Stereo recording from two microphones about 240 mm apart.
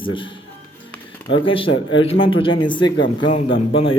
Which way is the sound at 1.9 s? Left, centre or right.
Left.